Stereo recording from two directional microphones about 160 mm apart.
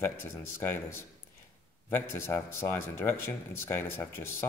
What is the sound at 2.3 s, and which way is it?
Speech, 15° left (ahead or behind).